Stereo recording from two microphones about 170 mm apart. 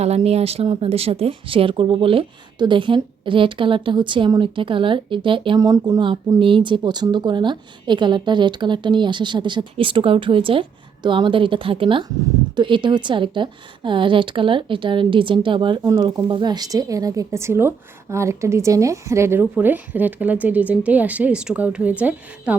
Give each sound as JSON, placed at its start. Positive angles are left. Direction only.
{"t": 0.0, "sound": "speech", "side_deg": -40}